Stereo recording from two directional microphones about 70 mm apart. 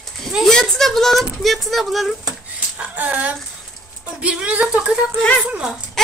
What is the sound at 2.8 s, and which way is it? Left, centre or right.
Speech, right.